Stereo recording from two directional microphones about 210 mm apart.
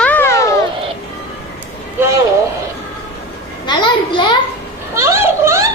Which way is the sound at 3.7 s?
20° left (ahead or behind).